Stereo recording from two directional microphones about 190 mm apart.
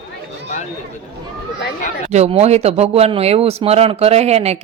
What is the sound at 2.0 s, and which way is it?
Speech, 35° right (ahead or behind).